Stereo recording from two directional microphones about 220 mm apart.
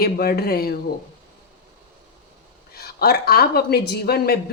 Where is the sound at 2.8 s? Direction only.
45° left (ahead or behind).